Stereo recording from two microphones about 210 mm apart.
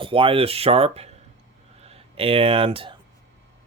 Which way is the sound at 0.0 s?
25° right (ahead or behind).